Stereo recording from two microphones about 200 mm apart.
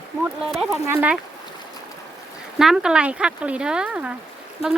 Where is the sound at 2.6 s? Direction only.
5° right (ahead or behind).